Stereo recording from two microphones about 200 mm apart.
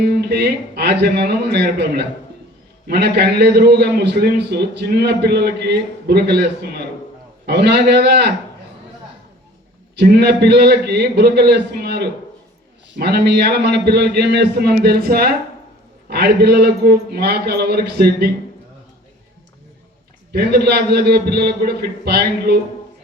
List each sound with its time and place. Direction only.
0.2 s a man's voice: 55° right (ahead or behind)
10.0 s a man's voice: 55° right (ahead or behind)
20.3 s a man's voice: 55° right (ahead or behind)